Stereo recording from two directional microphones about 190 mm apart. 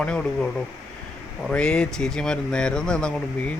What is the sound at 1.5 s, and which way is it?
Speech, 5° left (ahead or behind).